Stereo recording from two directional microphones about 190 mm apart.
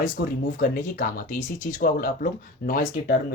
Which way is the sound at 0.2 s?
60° left (ahead or behind).